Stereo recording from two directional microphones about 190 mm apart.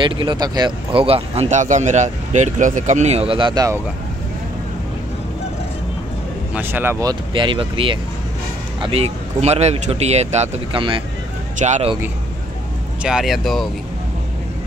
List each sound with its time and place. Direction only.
0.0 s speech: 25° right (ahead or behind)
6.5 s speech: 10° right (ahead or behind); by 11.0 s 30° right (ahead or behind)
11.5 s speech: 40° right (ahead or behind)
13.0 s speech: centre (ahead or behind)